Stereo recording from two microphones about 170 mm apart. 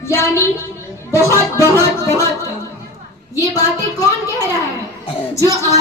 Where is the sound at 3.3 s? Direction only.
20° left (ahead or behind).